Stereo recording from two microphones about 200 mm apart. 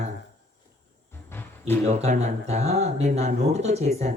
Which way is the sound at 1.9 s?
35° right (ahead or behind).